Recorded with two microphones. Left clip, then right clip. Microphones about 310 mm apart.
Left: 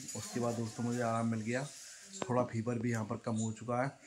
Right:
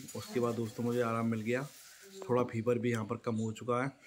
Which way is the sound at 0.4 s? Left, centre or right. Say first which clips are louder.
Right 3 dB; centre.